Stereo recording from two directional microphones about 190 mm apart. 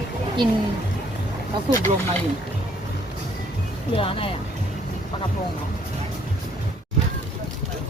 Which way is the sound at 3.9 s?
30° left (ahead or behind).